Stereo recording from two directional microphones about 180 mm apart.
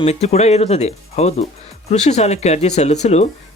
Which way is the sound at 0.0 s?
35° left (ahead or behind).